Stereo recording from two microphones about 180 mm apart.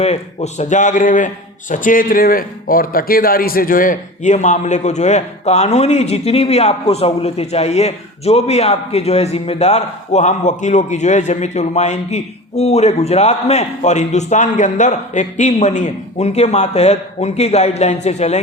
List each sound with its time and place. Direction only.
0.0 s a man's voice: 35° left (ahead or behind)